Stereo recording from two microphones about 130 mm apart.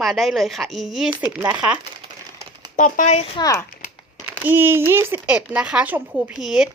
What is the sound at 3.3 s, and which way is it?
Speech, 30° left (ahead or behind).